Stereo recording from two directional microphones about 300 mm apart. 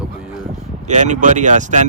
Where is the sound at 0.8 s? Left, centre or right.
Right.